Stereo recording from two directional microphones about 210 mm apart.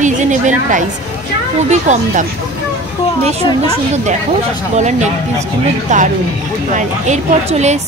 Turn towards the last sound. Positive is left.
turn(degrees=-35)  # may be behind; listen again after turning